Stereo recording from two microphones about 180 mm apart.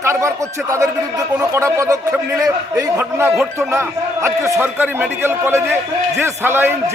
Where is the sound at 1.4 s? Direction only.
15° right (ahead or behind).